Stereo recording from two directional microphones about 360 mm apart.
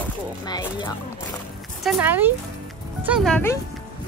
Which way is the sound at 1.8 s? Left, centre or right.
Centre.